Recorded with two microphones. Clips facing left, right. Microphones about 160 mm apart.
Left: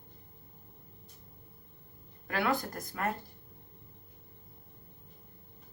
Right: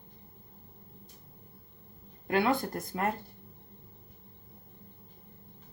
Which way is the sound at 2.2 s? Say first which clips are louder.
Right 4 dB; 25° right (ahead or behind).